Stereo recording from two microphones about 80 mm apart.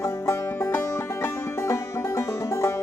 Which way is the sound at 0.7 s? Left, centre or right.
Left.